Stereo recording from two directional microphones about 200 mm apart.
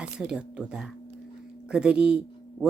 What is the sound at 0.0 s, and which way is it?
A man's voice, 5° right (ahead or behind).